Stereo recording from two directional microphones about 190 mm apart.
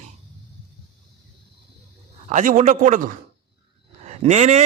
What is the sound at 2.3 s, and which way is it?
A man's voice, 40° right (ahead or behind).